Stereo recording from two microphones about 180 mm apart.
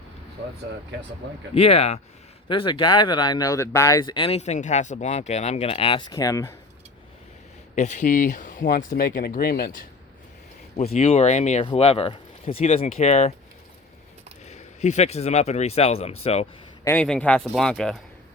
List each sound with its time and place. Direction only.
1.5 s speech: 35° left (ahead or behind); by 6.5 s 20° left (ahead or behind)
7.8 s speech: 40° left (ahead or behind)
10.9 s speech: 35° left (ahead or behind)
14.4 s speech: 40° left (ahead or behind)
16.8 s speech: 10° left (ahead or behind)